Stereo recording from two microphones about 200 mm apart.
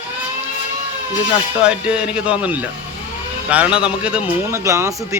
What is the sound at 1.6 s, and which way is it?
Speech, 5° right (ahead or behind).